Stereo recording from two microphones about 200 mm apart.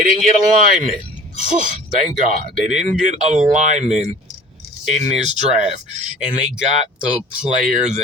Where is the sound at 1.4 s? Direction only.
40° right (ahead or behind).